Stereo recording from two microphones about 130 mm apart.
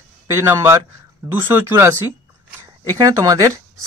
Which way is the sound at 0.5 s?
20° right (ahead or behind).